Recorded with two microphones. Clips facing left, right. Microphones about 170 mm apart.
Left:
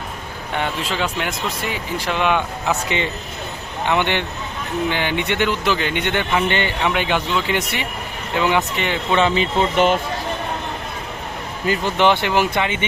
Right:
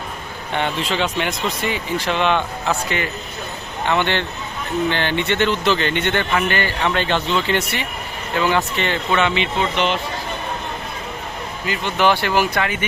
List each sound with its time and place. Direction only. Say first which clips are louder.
0.5 s speech: right 2 dB; 5° left (ahead or behind)
3.8 s a man's voice: even; 15° left (ahead or behind)
9.1 s speech: left 3 dB; 35° left (ahead or behind)
11.6 s speech: left 5 dB; 40° left (ahead or behind)
11.9 s speech: right 1 dB; 20° left (ahead or behind)